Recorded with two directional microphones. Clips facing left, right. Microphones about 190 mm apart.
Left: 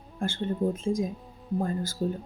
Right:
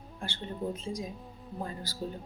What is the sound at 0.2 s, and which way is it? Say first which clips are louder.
Speech: left 9 dB; 50° left (ahead or behind).